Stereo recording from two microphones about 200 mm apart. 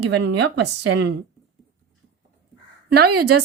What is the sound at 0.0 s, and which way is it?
Speech, 60° right (ahead or behind).